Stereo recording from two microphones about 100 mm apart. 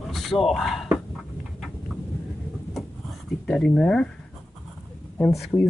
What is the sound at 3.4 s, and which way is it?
Speech, 5° left (ahead or behind).